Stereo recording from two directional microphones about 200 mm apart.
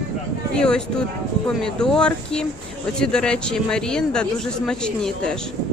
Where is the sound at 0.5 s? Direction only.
5° left (ahead or behind).